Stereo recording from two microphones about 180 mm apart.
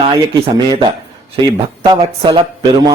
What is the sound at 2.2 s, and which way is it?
Speech, 30° right (ahead or behind).